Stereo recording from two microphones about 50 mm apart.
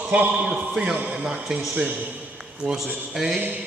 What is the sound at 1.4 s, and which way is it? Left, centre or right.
Speech, centre.